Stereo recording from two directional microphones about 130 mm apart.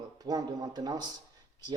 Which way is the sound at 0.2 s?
30° right (ahead or behind).